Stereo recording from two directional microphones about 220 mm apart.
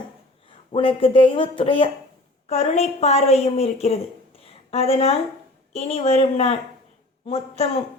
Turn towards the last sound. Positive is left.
turn(degrees=25)  # may be behind; listen again after turning